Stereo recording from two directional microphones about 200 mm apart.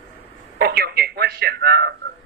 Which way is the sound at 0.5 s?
55° right (ahead or behind).